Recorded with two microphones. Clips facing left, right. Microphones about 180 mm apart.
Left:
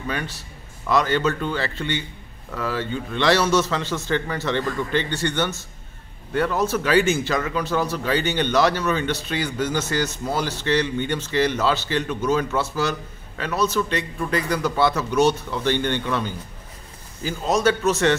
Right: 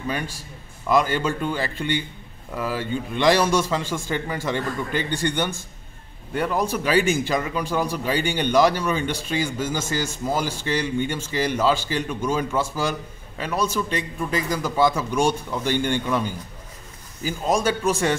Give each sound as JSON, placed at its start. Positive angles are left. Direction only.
{"t": 0.1, "sound": "a man's voice", "side_deg": -10}